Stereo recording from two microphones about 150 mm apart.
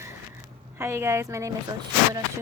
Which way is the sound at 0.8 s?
20° right (ahead or behind).